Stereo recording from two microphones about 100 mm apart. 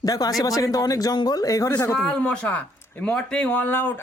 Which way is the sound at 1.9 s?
10° left (ahead or behind).